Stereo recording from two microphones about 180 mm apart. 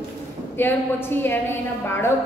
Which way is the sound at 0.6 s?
10° left (ahead or behind).